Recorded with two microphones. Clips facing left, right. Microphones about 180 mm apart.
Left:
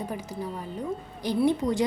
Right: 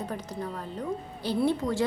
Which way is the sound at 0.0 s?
10° left (ahead or behind).